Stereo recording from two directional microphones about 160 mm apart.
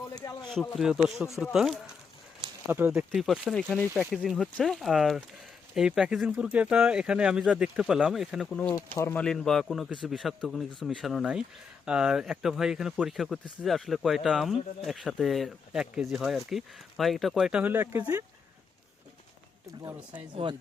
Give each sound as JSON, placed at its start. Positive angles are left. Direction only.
{"t": 0.2, "sound": "speech", "side_deg": 25}
{"t": 0.8, "sound": "speech", "side_deg": -5}
{"t": 2.6, "sound": "speech", "side_deg": -10}
{"t": 9.2, "sound": "speech", "side_deg": 5}
{"t": 19.8, "sound": "speech", "side_deg": -15}
{"t": 20.3, "sound": "speech", "side_deg": -30}